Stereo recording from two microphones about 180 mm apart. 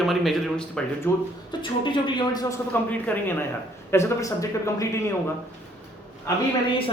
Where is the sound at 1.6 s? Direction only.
25° left (ahead or behind).